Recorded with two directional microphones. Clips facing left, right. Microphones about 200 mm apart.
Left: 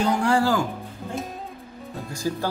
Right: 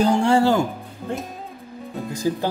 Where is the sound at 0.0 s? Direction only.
25° right (ahead or behind).